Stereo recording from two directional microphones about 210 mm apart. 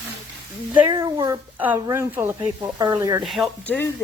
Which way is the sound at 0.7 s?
15° right (ahead or behind).